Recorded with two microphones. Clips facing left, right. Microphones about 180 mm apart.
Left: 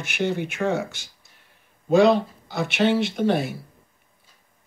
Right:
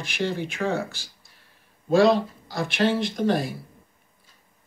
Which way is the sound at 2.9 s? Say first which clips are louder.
Left 4 dB; 65° left (ahead or behind).